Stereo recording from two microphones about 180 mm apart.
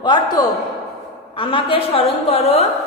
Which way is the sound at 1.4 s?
30° left (ahead or behind).